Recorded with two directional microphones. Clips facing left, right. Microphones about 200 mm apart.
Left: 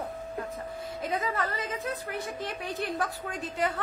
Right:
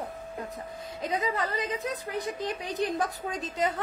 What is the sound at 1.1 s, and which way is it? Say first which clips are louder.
A woman's voice: right 2 dB; 15° right (ahead or behind).